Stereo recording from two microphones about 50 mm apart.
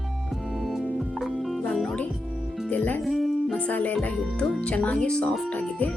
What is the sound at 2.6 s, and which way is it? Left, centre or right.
Music, left.